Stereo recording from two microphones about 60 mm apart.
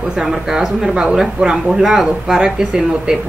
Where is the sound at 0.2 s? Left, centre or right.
Centre.